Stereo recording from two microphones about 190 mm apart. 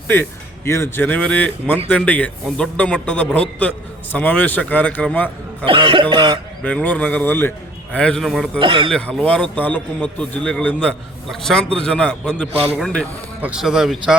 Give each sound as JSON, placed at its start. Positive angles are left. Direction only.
{"t": 0.1, "sound": "a man's voice", "side_deg": 10}
{"t": 5.6, "sound": "speech", "side_deg": -25}
{"t": 6.6, "sound": "a man's voice", "side_deg": 10}
{"t": 8.5, "sound": "speech", "side_deg": -25}
{"t": 8.9, "sound": "a man's voice", "side_deg": 5}